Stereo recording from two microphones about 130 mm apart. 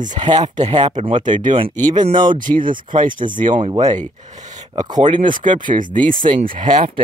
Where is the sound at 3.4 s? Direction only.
70° right (ahead or behind).